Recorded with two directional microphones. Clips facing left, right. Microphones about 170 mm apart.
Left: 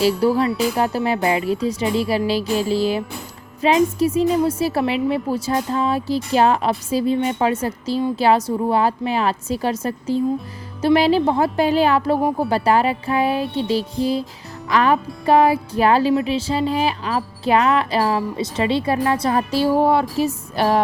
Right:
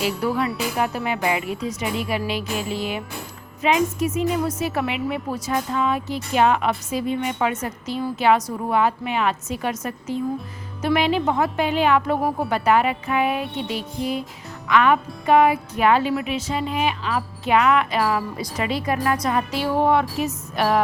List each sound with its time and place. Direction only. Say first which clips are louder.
0.3 s a woman's voice: left 4 dB; 30° left (ahead or behind)